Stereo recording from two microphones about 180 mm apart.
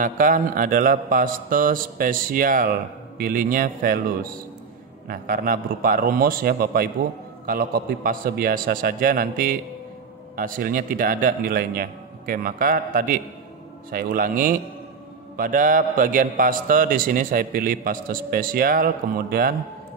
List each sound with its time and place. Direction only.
0.0 s a man's voice: 50° right (ahead or behind)